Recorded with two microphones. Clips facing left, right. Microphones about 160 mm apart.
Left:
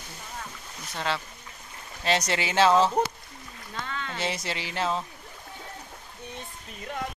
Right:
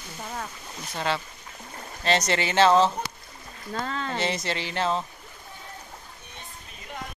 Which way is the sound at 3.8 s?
35° right (ahead or behind).